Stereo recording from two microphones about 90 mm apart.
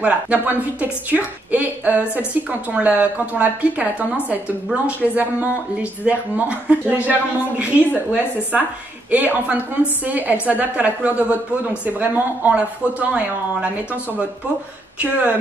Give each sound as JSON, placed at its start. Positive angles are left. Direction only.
{"t": 0.0, "sound": "speech", "side_deg": -15}
{"t": 15.0, "sound": "speech", "side_deg": -15}